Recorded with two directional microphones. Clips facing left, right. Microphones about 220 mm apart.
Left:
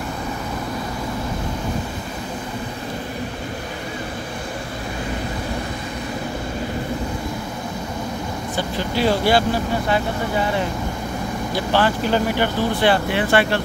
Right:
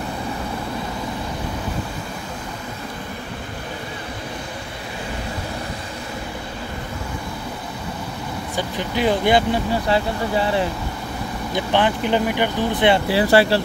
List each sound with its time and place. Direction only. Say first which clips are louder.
8.5 s speech: left 1 dB; 15° right (ahead or behind)
9.8 s speech: right 1 dB; 30° right (ahead or behind)
11.5 s speech: even; 20° right (ahead or behind)
13.1 s speech: right 3 dB; 35° right (ahead or behind)